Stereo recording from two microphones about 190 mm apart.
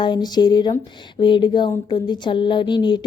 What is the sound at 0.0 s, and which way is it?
Speech, 20° left (ahead or behind).